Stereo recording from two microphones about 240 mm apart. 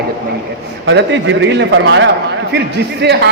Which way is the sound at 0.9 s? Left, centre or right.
Right.